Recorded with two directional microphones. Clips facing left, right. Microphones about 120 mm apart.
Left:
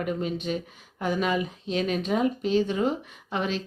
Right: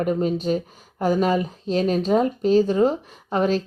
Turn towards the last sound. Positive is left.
turn(degrees=-40)  # may be behind; listen again after turning